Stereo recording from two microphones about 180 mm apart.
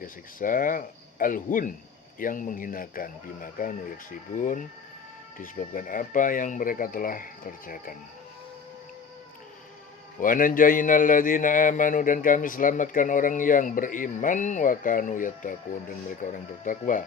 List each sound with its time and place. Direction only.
0.0 s speech: 50° left (ahead or behind)
10.2 s speech: 50° left (ahead or behind)